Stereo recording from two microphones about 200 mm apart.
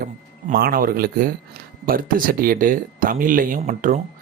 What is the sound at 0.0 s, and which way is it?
Speech, 50° right (ahead or behind).